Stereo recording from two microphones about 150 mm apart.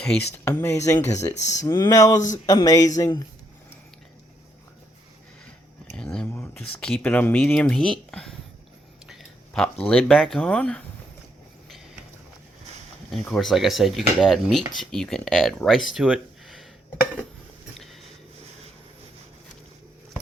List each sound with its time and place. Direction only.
0.4 s speech: 15° left (ahead or behind)
1.3 s speech: 50° left (ahead or behind)
1.6 s speech: 20° left (ahead or behind)
6.0 s speech: 5° left (ahead or behind)
9.0 s a sound: centre (ahead or behind)
9.9 s speech: 5° left (ahead or behind)
13.3 s speech: centre (ahead or behind)